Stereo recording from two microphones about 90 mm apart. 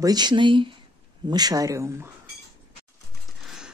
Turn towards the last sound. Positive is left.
turn(degrees=-5)  # may be behind; listen again after turning